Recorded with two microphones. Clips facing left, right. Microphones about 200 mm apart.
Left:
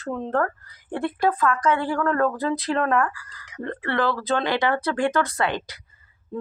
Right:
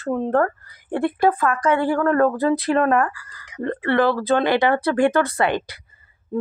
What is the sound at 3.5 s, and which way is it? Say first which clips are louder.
Speech: right 6 dB; 20° right (ahead or behind).